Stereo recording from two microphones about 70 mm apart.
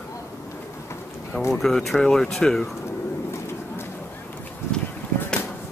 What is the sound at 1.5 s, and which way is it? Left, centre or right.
Speech, centre.